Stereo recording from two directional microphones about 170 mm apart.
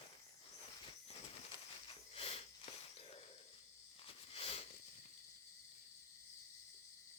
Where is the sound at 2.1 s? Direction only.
35° left (ahead or behind).